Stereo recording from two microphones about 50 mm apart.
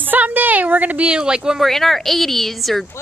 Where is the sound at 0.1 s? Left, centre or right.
Right; by 1.6 s centre.